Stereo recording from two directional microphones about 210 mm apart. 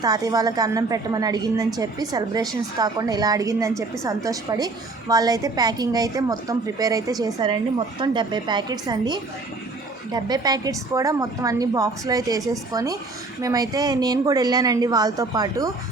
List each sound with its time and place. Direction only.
0.0 s a woman's voice: 20° right (ahead or behind)